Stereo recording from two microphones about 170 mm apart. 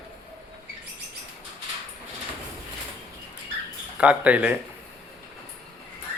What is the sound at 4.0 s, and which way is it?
Speech, 10° right (ahead or behind).